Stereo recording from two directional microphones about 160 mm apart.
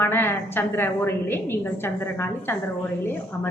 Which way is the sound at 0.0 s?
15° left (ahead or behind).